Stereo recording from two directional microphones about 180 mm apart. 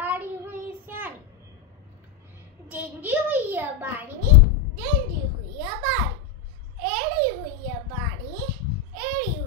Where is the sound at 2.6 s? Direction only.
10° right (ahead or behind).